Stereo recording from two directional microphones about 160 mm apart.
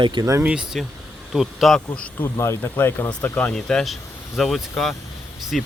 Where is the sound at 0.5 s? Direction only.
5° right (ahead or behind).